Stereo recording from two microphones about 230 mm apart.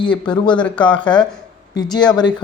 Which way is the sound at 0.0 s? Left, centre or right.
Left.